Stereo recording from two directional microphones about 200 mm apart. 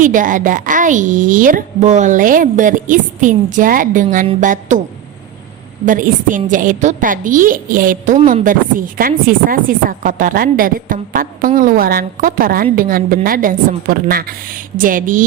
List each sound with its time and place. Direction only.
0.0 s a woman's voice: 40° right (ahead or behind)
5.8 s a woman's voice: 40° right (ahead or behind)